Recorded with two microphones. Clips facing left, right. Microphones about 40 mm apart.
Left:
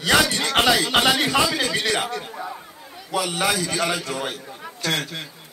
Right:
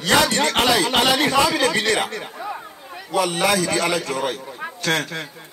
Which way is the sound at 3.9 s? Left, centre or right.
Right.